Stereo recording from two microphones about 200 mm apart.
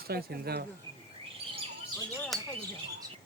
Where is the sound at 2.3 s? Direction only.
Centre (ahead or behind).